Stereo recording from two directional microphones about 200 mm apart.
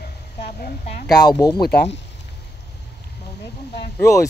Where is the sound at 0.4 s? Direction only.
50° left (ahead or behind).